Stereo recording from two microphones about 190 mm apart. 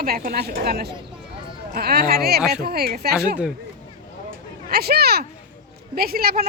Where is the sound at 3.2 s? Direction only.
5° right (ahead or behind).